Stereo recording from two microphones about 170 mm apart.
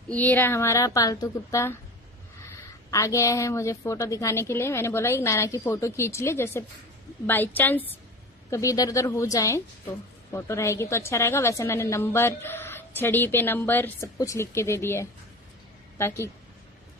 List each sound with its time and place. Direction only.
0.1 s a woman's voice: 10° left (ahead or behind)